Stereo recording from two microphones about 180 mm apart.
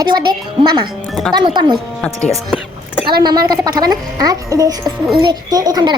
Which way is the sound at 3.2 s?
20° right (ahead or behind).